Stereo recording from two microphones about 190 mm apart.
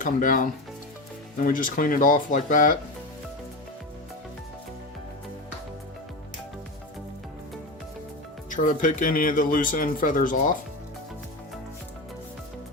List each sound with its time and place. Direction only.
0.0 s speech: 45° left (ahead or behind)
8.4 s speech: 45° left (ahead or behind)